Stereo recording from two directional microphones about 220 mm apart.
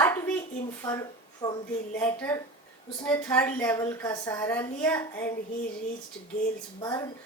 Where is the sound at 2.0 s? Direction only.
10° left (ahead or behind).